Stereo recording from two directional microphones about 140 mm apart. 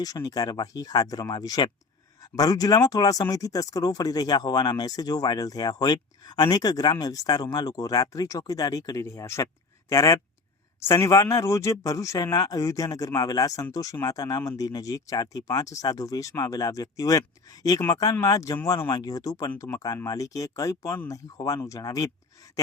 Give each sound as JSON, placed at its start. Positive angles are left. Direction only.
{"t": 0.0, "sound": "speech", "side_deg": 25}